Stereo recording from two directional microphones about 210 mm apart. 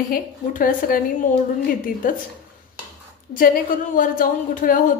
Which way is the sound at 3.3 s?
40° left (ahead or behind).